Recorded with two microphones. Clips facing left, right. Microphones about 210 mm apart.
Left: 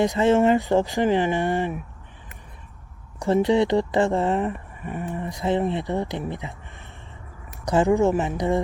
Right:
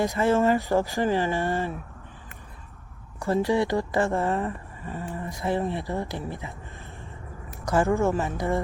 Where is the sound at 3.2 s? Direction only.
20° left (ahead or behind).